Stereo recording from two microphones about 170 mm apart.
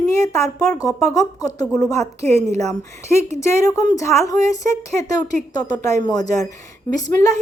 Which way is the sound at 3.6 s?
20° left (ahead or behind).